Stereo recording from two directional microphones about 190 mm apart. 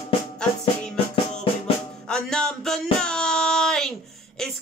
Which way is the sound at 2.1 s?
5° left (ahead or behind).